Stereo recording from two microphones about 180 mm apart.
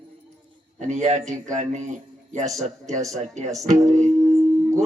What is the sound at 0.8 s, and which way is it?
A man's voice, 40° right (ahead or behind).